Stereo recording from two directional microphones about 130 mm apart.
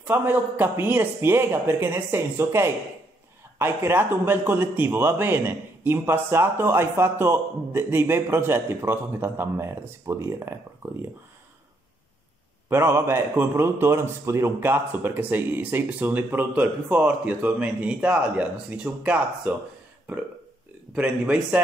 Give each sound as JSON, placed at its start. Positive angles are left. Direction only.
{"t": 0.0, "sound": "a man's voice", "side_deg": -15}
{"t": 12.6, "sound": "a man's voice", "side_deg": -20}